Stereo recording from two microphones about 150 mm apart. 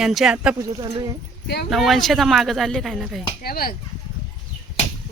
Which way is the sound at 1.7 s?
Centre (ahead or behind).